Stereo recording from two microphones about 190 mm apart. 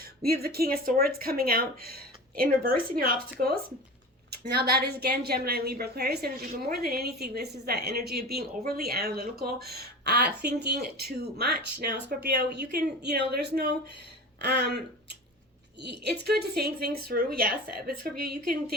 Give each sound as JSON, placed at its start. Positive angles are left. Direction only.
{"t": 0.3, "sound": "a woman's voice", "side_deg": -55}
{"t": 15.8, "sound": "a woman's voice", "side_deg": -60}